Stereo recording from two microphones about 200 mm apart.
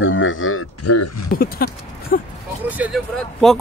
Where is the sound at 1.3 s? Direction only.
50° left (ahead or behind).